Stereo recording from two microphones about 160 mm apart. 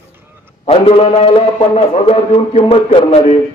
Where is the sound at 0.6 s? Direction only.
35° left (ahead or behind).